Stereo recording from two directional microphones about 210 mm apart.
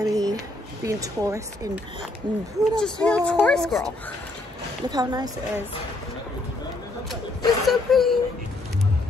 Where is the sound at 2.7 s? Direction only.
5° left (ahead or behind).